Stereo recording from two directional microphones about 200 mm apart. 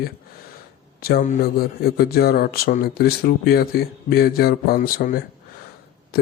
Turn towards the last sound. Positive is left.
turn(degrees=45)  # may be behind; listen again after turning